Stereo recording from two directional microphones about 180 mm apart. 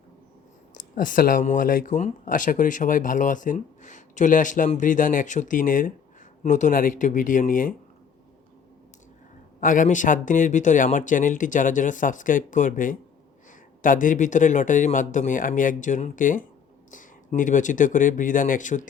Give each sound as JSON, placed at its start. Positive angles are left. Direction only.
{"t": 0.9, "sound": "speech", "side_deg": 50}
{"t": 9.6, "sound": "speech", "side_deg": 45}